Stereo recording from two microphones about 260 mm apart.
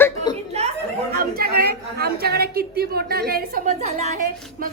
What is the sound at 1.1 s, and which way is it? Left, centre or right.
A woman's voice, right.